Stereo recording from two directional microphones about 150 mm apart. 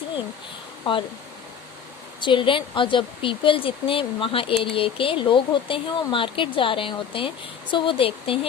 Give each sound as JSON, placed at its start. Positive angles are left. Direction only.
{"t": 0.9, "sound": "speech", "side_deg": 35}
{"t": 2.2, "sound": "speech", "side_deg": 35}